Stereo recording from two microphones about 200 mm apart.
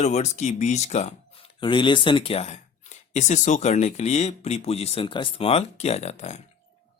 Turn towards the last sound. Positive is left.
turn(degrees=35)  # may be behind; listen again after turning